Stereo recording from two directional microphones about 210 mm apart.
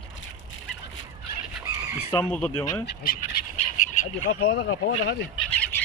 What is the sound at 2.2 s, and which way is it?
Speech, 5° left (ahead or behind).